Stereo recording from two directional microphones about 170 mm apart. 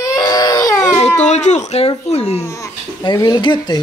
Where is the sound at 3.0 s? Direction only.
25° left (ahead or behind).